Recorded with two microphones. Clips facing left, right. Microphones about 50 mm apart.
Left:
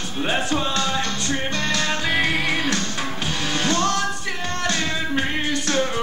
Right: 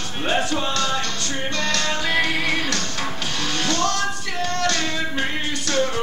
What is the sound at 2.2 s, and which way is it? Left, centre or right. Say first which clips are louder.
Music: left 1 dB; left.